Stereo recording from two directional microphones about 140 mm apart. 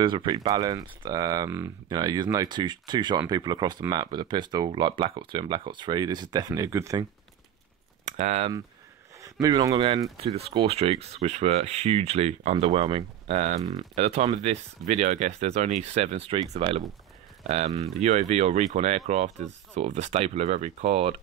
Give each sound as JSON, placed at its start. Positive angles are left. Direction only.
{"t": 0.0, "sound": "speech", "side_deg": -35}
{"t": 8.2, "sound": "speech", "side_deg": -50}
{"t": 9.2, "sound": "speech", "side_deg": -25}
{"t": 10.2, "sound": "speech", "side_deg": -45}